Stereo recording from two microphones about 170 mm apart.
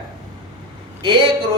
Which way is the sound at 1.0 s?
30° right (ahead or behind).